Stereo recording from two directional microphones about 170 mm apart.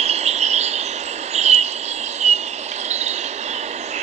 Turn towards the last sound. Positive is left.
turn(degrees=-40)  # may be behind; listen again after turning